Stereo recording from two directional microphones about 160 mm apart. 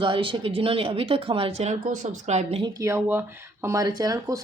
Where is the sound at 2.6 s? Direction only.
20° right (ahead or behind).